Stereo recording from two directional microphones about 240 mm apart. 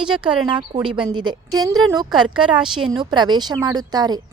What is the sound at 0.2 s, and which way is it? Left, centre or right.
Speech, centre.